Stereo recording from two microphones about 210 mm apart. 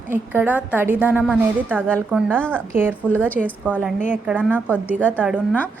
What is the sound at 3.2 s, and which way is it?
A woman's voice, 10° right (ahead or behind).